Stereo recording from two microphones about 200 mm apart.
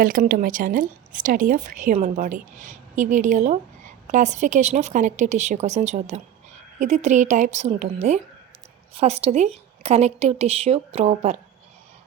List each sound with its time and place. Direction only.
0.0 s a woman's voice: 45° right (ahead or behind)